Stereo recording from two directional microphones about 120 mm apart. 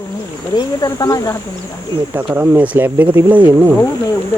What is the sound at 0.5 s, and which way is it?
Speech, 30° left (ahead or behind).